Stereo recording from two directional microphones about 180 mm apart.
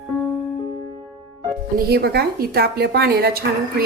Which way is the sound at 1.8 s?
60° right (ahead or behind).